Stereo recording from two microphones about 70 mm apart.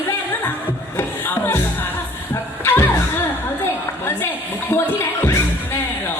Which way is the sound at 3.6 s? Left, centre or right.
Left.